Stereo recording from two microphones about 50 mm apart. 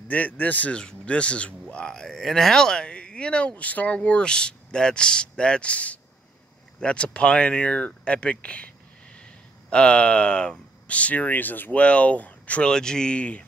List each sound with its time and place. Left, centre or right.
0.1 s speech: left
0.7 s speech: left
11.8 s speech: left
12.6 s speech: centre